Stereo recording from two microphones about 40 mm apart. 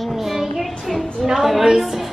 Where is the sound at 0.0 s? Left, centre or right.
Centre.